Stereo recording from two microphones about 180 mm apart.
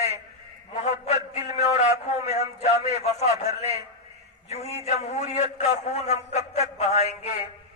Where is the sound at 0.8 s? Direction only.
40° left (ahead or behind).